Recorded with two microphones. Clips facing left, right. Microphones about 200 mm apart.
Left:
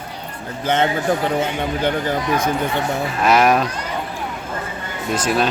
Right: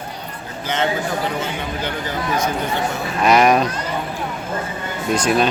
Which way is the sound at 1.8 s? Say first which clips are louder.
Left 6 dB; 55° left (ahead or behind).